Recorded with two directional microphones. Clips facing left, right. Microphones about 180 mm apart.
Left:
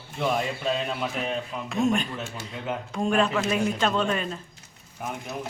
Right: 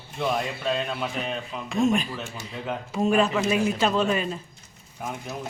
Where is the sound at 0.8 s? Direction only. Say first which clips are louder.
Left 1 dB; centre (ahead or behind).